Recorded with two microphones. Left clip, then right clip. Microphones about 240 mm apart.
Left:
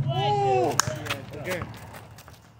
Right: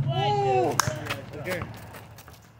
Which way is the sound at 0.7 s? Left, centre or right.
Left.